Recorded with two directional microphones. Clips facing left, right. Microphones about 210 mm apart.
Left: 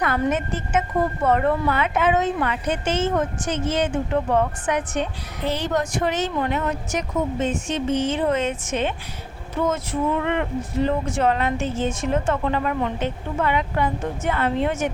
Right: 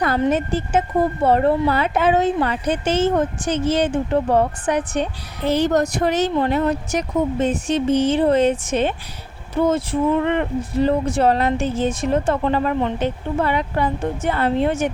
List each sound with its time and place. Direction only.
0.2 s speech: 30° right (ahead or behind)